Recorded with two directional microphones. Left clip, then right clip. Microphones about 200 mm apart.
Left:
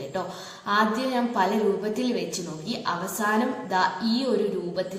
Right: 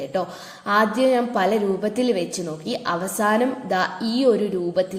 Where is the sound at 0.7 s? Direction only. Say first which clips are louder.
Right 6 dB; 40° right (ahead or behind).